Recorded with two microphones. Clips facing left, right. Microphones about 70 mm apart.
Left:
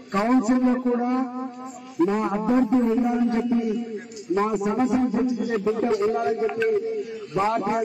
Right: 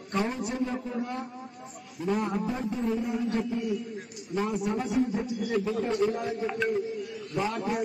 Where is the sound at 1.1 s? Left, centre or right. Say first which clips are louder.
Left 11 dB; left.